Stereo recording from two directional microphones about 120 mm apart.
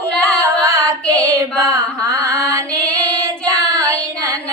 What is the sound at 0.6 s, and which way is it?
Music, 30° right (ahead or behind).